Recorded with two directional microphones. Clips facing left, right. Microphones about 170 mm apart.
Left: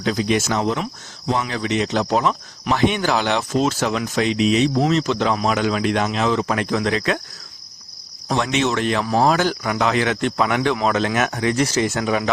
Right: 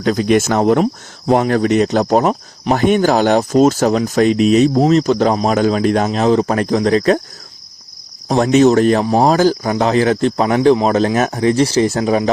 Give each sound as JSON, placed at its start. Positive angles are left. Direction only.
{"t": 0.0, "sound": "speech", "side_deg": -50}
{"t": 8.3, "sound": "speech", "side_deg": -40}